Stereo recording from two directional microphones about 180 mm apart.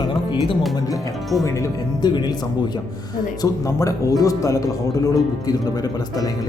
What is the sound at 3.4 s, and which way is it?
Speech, 20° left (ahead or behind).